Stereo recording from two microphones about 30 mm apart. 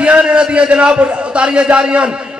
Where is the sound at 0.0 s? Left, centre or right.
Right.